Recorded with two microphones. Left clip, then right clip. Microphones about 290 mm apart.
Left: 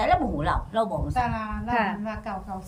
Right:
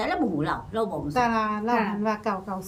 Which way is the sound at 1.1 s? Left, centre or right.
Centre.